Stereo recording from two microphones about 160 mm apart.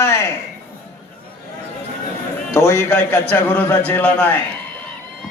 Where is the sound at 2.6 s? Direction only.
15° left (ahead or behind).